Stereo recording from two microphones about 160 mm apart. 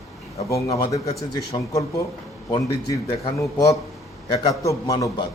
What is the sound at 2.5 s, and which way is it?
Speech, 25° left (ahead or behind).